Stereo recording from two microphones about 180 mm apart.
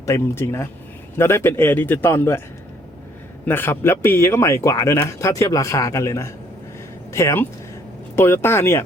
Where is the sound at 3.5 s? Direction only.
10° left (ahead or behind).